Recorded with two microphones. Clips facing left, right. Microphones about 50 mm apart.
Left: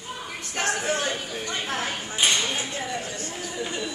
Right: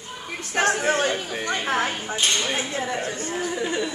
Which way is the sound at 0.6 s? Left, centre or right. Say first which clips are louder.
Right 5 dB; right.